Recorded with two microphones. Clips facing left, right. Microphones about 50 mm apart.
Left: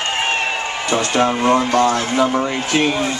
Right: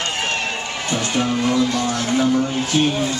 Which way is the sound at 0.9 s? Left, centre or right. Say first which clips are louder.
Left 5 dB; left.